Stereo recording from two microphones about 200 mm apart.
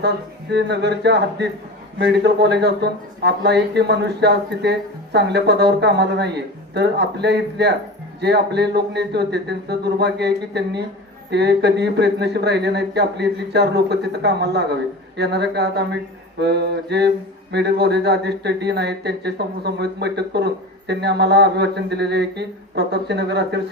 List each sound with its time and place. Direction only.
0.5 s speech: 60° right (ahead or behind)